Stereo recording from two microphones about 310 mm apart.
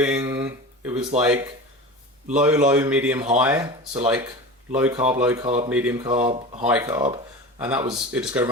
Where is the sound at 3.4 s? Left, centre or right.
Centre.